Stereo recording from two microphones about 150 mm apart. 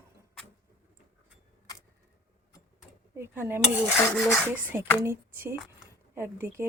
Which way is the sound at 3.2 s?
15° right (ahead or behind).